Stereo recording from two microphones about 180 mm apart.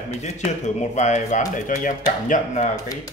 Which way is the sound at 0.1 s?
40° left (ahead or behind).